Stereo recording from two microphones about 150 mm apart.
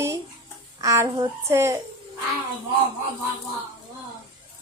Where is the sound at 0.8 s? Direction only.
20° right (ahead or behind).